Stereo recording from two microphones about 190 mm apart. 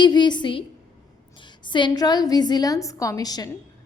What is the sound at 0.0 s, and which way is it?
A woman's voice, 25° left (ahead or behind).